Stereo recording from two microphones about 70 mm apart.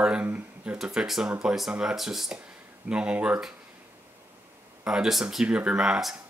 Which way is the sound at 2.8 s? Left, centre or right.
Centre.